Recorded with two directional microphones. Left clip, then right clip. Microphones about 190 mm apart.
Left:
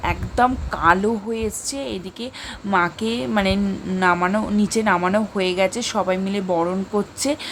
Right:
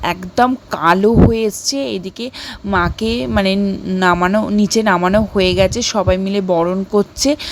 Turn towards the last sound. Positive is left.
turn(degrees=-30)  # may be behind; listen again after turning